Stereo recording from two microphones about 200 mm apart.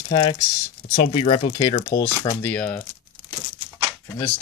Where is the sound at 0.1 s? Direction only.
25° left (ahead or behind).